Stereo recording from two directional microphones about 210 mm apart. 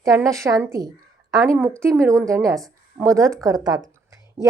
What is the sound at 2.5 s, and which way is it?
Speech, centre (ahead or behind).